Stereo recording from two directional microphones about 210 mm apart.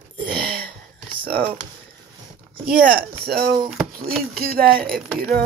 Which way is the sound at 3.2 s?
50° right (ahead or behind).